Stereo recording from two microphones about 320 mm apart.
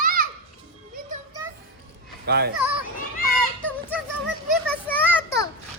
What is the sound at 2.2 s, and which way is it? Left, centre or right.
Speech, right.